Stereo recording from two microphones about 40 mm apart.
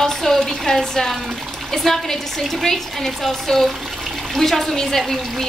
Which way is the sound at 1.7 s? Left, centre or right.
Centre.